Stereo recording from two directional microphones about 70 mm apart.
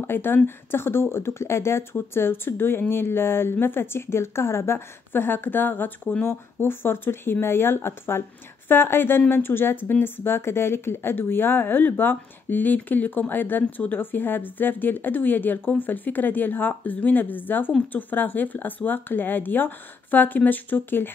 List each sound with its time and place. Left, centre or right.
0.0 s speech: left